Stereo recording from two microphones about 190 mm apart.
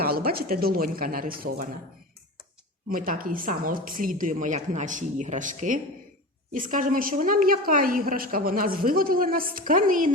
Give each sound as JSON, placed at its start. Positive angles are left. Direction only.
{"t": 0.0, "sound": "a woman's voice", "side_deg": -50}
{"t": 2.9, "sound": "a woman's voice", "side_deg": -50}